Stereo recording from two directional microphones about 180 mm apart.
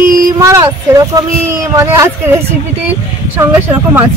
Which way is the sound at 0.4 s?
15° right (ahead or behind).